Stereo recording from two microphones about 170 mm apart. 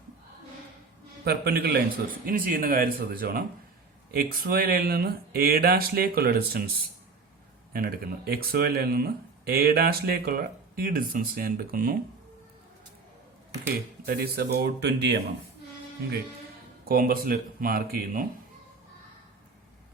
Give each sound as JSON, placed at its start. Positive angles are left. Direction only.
{"t": 1.2, "sound": "speech", "side_deg": -65}
{"t": 2.2, "sound": "speech", "side_deg": -55}
{"t": 7.7, "sound": "speech", "side_deg": -60}
{"t": 13.7, "sound": "speech", "side_deg": -60}
{"t": 16.9, "sound": "speech", "side_deg": -60}